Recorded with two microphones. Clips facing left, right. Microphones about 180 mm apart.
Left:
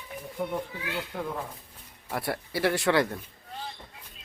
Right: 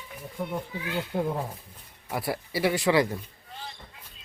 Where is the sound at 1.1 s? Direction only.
30° right (ahead or behind).